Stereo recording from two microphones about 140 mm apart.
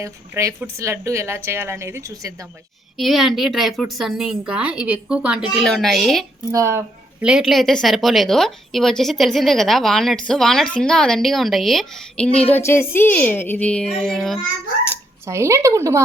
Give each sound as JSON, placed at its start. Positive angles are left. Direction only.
{"t": 0.0, "sound": "a woman's voice", "side_deg": -20}
{"t": 3.0, "sound": "a woman's voice", "side_deg": 0}
{"t": 6.5, "sound": "a woman's voice", "side_deg": -20}
{"t": 7.2, "sound": "a woman's voice", "side_deg": -5}
{"t": 14.8, "sound": "speech", "side_deg": -20}